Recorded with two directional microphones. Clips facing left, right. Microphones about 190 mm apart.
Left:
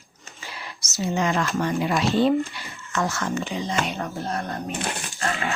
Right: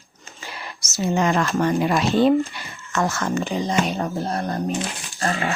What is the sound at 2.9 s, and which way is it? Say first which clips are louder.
Speech: right 3 dB; 45° right (ahead or behind).